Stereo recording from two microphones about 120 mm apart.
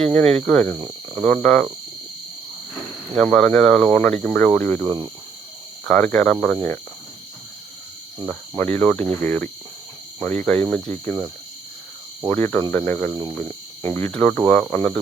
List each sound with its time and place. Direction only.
0.0 s speech: 10° left (ahead or behind)
3.2 s speech: 5° left (ahead or behind)
4.9 s speech: 35° right (ahead or behind)
5.9 s speech: 10° left (ahead or behind)
8.8 s speech: 15° left (ahead or behind)
12.3 s speech: 20° left (ahead or behind)